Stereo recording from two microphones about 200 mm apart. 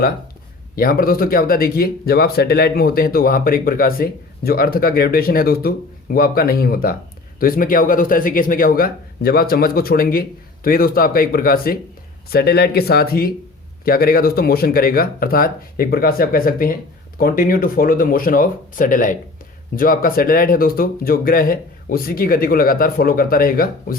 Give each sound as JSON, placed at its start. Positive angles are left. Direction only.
{"t": 0.8, "sound": "speech", "side_deg": 45}